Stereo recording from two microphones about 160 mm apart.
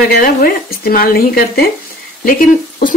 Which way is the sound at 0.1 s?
70° left (ahead or behind).